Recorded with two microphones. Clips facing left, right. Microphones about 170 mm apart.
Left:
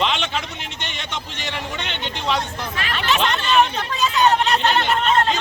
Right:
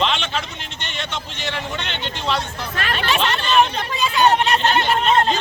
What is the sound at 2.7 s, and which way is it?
Speech, 45° right (ahead or behind).